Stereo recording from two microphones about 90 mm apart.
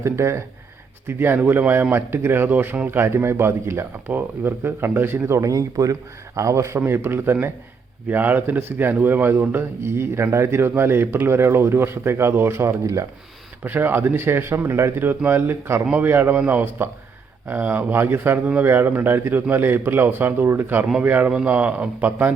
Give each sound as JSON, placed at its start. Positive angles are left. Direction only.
{"t": 0.0, "sound": "speech", "side_deg": -30}
{"t": 13.7, "sound": "a man's voice", "side_deg": -25}